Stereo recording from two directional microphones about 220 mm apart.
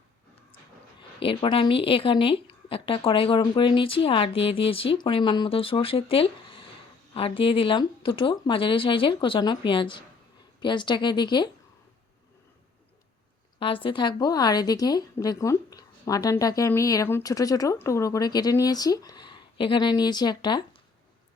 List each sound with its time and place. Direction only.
1.2 s a woman's voice: 25° left (ahead or behind)
13.6 s a woman's voice: 25° left (ahead or behind)